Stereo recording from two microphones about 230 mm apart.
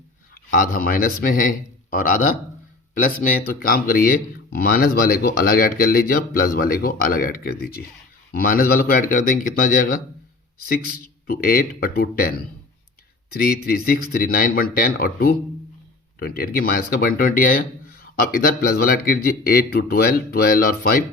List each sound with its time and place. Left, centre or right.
0.5 s speech: left
13.3 s speech: left